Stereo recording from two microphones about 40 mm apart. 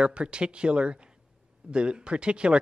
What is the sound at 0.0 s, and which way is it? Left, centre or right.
Speech, right.